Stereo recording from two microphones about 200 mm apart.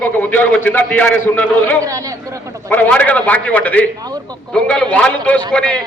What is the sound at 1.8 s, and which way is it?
Speech, 15° right (ahead or behind).